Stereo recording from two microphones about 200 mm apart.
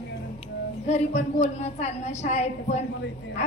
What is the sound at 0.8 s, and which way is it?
A woman's voice, 35° left (ahead or behind).